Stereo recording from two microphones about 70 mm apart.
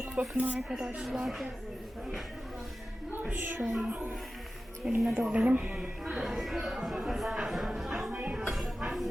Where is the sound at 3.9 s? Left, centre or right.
Right.